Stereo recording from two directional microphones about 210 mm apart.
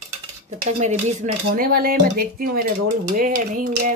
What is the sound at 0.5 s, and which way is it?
Cutlery, 35° right (ahead or behind).